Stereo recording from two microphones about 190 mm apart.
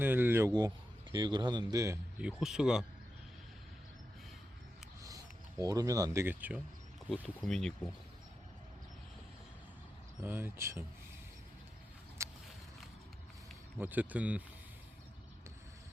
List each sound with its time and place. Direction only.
0.0 s speech: 10° right (ahead or behind)
2.2 s speech: 5° right (ahead or behind)
5.0 s speech: 20° right (ahead or behind)
7.4 s speech: 5° left (ahead or behind)
10.2 s speech: 10° right (ahead or behind)
12.2 s walk: 15° right (ahead or behind)
13.7 s speech: 10° right (ahead or behind)